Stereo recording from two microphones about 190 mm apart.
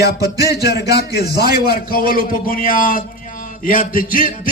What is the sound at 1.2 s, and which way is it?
A man's voice, 55° left (ahead or behind).